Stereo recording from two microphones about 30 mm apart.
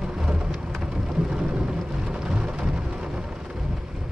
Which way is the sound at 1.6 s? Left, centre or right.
Right.